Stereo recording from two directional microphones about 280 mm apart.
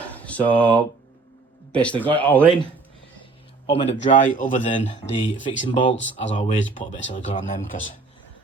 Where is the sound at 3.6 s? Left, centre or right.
Left.